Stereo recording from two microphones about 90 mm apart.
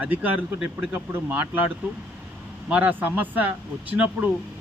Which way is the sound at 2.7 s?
20° right (ahead or behind).